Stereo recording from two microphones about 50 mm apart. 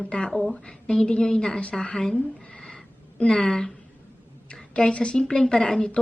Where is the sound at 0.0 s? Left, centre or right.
Left.